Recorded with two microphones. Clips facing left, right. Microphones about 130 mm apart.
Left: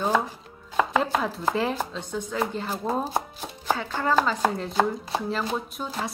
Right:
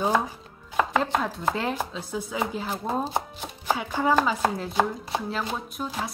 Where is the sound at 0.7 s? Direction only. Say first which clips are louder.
Left 1 dB; centre (ahead or behind).